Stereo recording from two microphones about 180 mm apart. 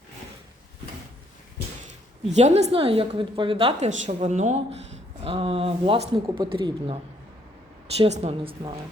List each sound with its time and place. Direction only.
2.3 s a woman's voice: 35° right (ahead or behind)